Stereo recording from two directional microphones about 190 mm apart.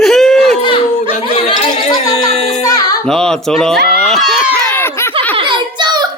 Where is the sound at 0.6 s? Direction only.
30° left (ahead or behind).